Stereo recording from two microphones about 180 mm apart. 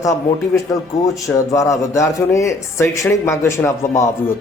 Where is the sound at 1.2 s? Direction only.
20° left (ahead or behind).